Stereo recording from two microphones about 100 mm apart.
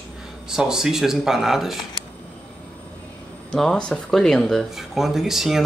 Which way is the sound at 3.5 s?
5° left (ahead or behind).